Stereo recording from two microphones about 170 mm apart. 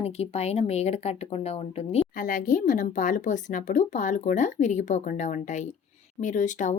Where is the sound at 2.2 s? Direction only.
50° left (ahead or behind).